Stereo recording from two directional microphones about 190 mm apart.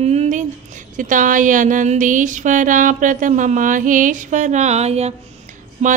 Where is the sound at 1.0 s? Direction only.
45° right (ahead or behind).